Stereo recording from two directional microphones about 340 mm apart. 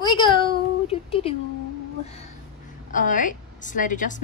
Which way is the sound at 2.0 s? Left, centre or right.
Centre.